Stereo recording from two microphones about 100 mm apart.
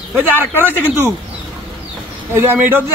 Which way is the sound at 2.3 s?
15° right (ahead or behind).